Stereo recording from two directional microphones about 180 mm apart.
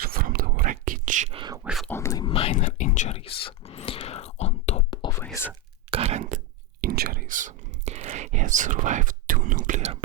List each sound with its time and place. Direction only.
0.0 s whispering: 55° right (ahead or behind)
1.3 s whispering: 25° right (ahead or behind)
1.6 s whispering: centre (ahead or behind)
1.9 s whispering: 15° left (ahead or behind)
2.2 s whispering: 30° left (ahead or behind)
5.2 s whispering: 10° left (ahead or behind)
5.9 s a sound: 35° right (ahead or behind)
6.8 s whispering: 55° right (ahead or behind); by 10.0 s 40° right (ahead or behind)